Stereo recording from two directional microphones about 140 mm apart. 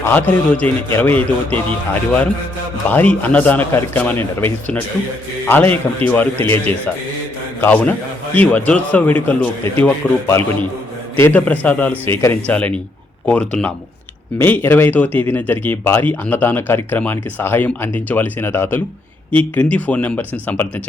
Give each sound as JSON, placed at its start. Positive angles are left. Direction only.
{"t": 0.0, "sound": "speech", "side_deg": 10}
{"t": 2.9, "sound": "speech", "side_deg": 10}